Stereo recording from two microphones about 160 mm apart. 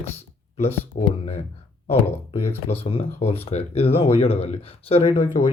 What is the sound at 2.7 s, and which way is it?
Speech, 35° left (ahead or behind).